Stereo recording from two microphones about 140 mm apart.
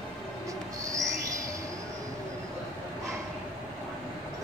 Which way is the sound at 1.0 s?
20° right (ahead or behind).